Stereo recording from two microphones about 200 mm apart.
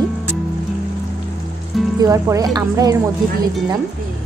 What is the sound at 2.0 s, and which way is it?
Speech, 15° right (ahead or behind).